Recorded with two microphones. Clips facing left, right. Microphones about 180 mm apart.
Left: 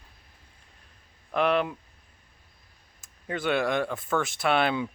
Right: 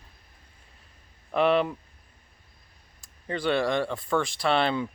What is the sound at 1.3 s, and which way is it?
Speech, centre (ahead or behind).